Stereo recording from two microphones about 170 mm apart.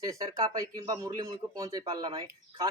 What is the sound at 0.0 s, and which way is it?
Speech, 20° right (ahead or behind).